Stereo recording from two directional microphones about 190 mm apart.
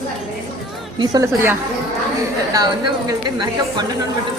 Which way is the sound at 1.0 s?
20° right (ahead or behind).